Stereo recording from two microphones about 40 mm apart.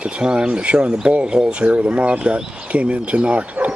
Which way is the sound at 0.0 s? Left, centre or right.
Right.